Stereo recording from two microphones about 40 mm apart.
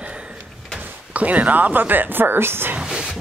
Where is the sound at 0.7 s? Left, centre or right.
Right.